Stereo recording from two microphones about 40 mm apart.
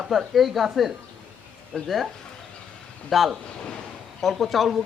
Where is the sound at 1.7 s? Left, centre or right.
Left.